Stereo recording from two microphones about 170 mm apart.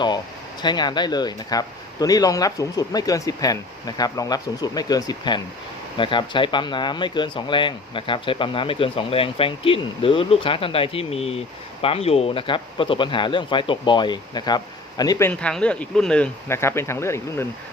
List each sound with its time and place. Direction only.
0.6 s speech: 25° left (ahead or behind)
15.3 s speech: 5° left (ahead or behind)